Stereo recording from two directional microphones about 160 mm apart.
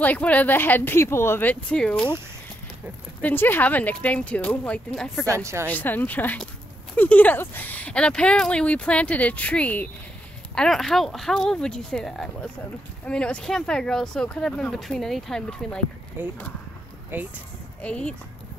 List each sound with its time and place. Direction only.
0.0 s speech: 10° left (ahead or behind)
3.2 s speech: 10° left (ahead or behind)
5.2 s a woman's voice: 20° right (ahead or behind)
5.7 s speech: 10° left (ahead or behind)
16.2 s speech: 15° right (ahead or behind)
17.8 s speech: 5° left (ahead or behind)